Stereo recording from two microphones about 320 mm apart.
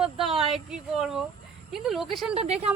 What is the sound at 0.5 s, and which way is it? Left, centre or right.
Speech, centre.